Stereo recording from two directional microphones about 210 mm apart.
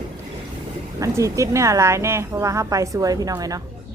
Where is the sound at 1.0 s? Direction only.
15° right (ahead or behind).